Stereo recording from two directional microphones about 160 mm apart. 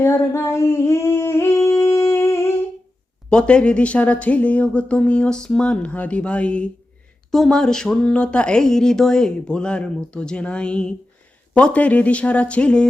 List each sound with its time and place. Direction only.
0.0 s singing: 15° left (ahead or behind)
3.2 s speech: 5° left (ahead or behind)